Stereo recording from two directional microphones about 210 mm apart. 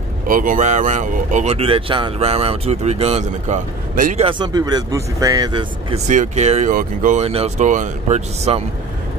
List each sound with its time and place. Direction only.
0.3 s speech: 40° right (ahead or behind)
4.2 s speech: 20° right (ahead or behind)
6.0 s speech: 35° right (ahead or behind)